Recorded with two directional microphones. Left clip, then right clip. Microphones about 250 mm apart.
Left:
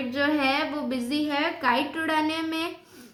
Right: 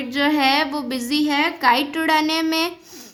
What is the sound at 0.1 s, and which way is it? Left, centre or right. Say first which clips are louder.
A woman's voice: right 7 dB; right.